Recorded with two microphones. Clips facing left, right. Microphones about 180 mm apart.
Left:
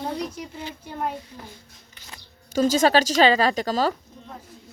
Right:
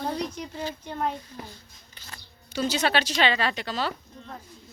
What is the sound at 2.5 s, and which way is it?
Speech, 45° left (ahead or behind).